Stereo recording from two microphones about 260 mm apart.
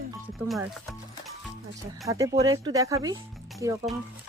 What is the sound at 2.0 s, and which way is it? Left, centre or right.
Speech, centre.